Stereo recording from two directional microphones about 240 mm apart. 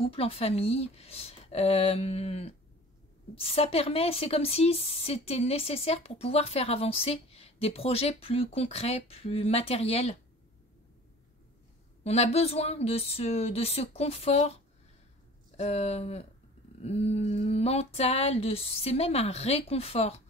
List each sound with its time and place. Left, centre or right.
0.0 s a woman's voice: left
12.0 s a woman's voice: left